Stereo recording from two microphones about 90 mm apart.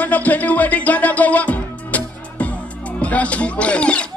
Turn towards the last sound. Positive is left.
turn(degrees=10)  # may be behind; listen again after turning